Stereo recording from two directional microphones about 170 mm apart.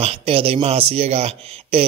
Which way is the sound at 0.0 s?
35° right (ahead or behind).